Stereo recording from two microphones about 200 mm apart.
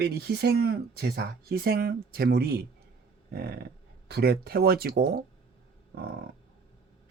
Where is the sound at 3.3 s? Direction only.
50° right (ahead or behind).